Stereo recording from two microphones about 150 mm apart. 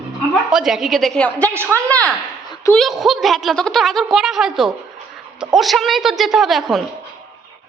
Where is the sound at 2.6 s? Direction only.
20° left (ahead or behind).